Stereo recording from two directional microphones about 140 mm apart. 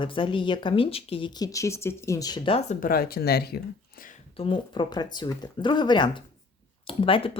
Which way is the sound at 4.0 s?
90° left.